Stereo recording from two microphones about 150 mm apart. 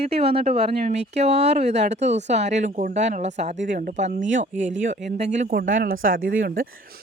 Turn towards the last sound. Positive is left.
turn(degrees=-75)  # may be behind; listen again after turning